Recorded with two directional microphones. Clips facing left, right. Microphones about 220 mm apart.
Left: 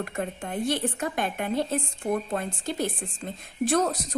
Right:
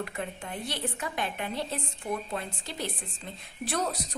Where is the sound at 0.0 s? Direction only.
45° left (ahead or behind).